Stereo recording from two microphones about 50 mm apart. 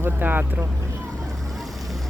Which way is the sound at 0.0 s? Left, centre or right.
Right.